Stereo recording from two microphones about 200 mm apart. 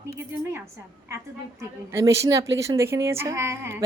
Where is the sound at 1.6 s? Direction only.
15° right (ahead or behind).